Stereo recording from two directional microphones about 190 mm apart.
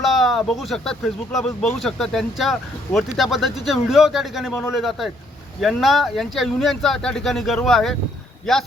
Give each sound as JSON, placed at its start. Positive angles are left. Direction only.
{"t": 0.0, "sound": "speech", "side_deg": 0}